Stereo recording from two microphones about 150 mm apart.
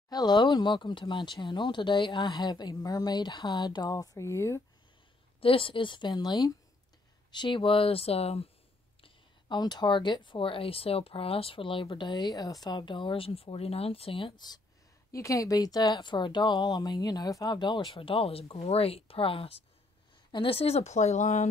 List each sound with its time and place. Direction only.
0.1 s speech: 30° left (ahead or behind)
5.4 s speech: 35° left (ahead or behind)
9.0 s speech: 30° left (ahead or behind)
15.0 s speech: 20° left (ahead or behind); by 21.5 s 50° left (ahead or behind)